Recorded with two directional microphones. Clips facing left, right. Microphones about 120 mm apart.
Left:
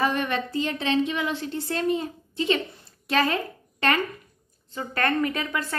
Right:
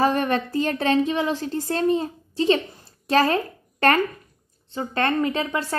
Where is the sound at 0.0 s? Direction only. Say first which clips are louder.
Right 4 dB; 40° right (ahead or behind).